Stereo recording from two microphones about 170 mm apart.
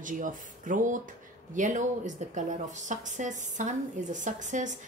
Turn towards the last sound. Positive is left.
turn(degrees=-45)  # may be behind; listen again after turning